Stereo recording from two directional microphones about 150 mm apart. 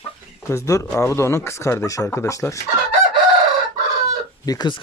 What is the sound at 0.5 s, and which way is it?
Speech, 20° left (ahead or behind).